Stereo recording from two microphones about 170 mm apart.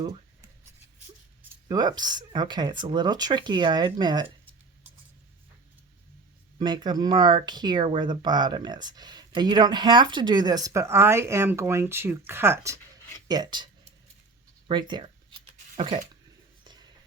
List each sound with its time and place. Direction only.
1.6 s speech: 25° right (ahead or behind)
6.6 s speech: 25° right (ahead or behind)
14.7 s shuffling cards: 25° right (ahead or behind)